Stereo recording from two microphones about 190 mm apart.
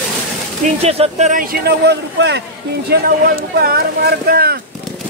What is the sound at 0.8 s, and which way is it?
Speech, 35° right (ahead or behind).